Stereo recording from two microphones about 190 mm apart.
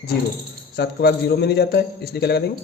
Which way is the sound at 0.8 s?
60° left (ahead or behind).